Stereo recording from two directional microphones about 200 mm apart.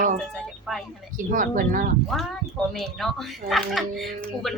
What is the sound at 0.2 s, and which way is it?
Speech, centre (ahead or behind).